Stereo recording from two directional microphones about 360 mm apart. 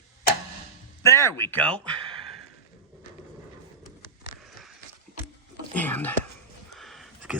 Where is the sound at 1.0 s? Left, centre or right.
Centre.